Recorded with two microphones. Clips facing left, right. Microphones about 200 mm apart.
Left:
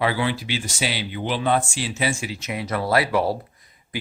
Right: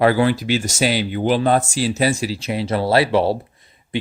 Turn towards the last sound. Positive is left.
turn(degrees=-25)  # may be behind; listen again after turning